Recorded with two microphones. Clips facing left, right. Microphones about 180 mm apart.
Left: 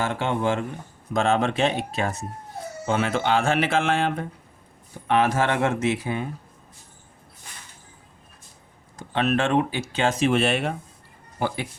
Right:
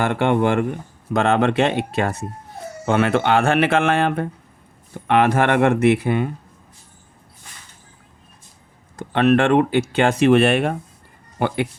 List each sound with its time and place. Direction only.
0.0 s speech: 65° right (ahead or behind)
9.0 s speech: 60° right (ahead or behind)